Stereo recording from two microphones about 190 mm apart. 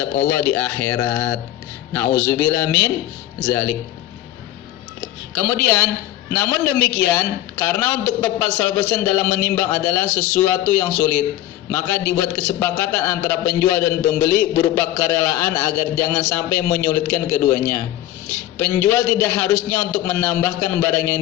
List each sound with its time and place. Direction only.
0.0 s a man's voice: 10° left (ahead or behind)
4.9 s a man's voice: 15° left (ahead or behind)